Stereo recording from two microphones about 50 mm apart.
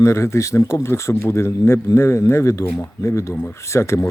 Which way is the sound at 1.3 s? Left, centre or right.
Left.